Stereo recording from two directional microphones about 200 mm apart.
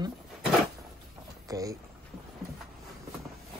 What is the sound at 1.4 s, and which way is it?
Speech, 15° right (ahead or behind).